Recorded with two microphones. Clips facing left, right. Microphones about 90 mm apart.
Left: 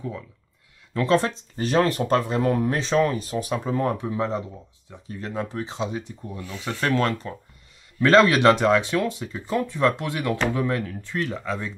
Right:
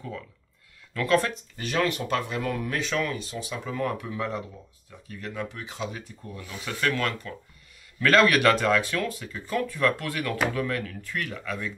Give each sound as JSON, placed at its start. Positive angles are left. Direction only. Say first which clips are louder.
{"t": 0.9, "sound": "speech", "louder": "left 3 dB", "side_deg": 25}
{"t": 3.6, "sound": "speech", "louder": "left 5 dB", "side_deg": 30}